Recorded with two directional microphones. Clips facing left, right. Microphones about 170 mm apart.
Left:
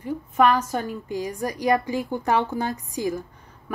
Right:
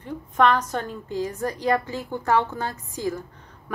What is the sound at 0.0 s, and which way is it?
A woman's voice, 10° left (ahead or behind).